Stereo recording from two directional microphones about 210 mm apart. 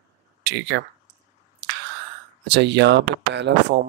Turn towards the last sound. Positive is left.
turn(degrees=-55)  # may be behind; listen again after turning